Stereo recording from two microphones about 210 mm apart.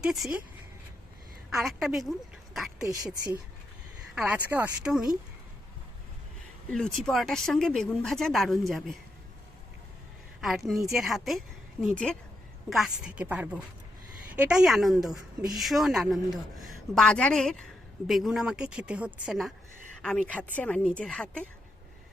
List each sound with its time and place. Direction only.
0.0 s a woman's voice: 5° right (ahead or behind)
1.5 s a woman's voice: centre (ahead or behind)
2.8 s a woman's voice: 15° right (ahead or behind)
4.1 s a woman's voice: 5° right (ahead or behind)
6.7 s a woman's voice: 5° left (ahead or behind)
10.4 s a woman's voice: centre (ahead or behind)